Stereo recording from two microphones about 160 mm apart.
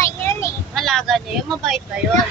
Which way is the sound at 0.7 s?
Centre (ahead or behind).